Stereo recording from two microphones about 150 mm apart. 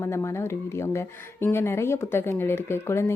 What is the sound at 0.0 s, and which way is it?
Speech, 20° left (ahead or behind).